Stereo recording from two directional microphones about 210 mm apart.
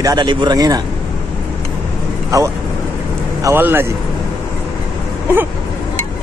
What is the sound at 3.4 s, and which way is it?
Speech, 10° right (ahead or behind).